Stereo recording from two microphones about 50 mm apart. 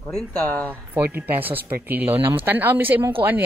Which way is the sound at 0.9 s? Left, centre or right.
Right.